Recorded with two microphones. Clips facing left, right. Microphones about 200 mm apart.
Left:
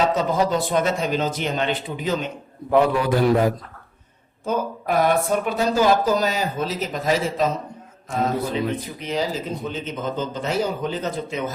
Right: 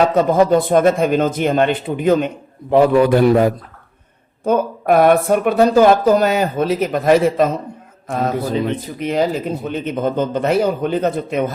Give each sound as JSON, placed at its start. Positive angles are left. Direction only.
{"t": 0.1, "sound": "speech", "side_deg": -55}
{"t": 8.6, "sound": "speech", "side_deg": -60}